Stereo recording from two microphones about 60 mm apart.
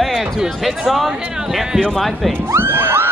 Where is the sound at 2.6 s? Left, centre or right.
Right.